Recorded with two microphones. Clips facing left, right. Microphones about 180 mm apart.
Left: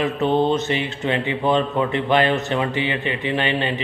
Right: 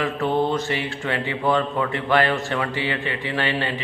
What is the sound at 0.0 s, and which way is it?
Speech, 20° left (ahead or behind).